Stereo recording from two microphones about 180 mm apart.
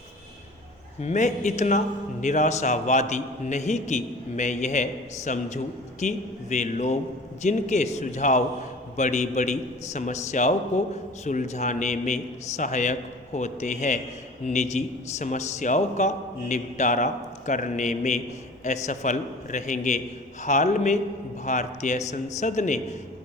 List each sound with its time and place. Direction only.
1.0 s a man's voice: 40° left (ahead or behind)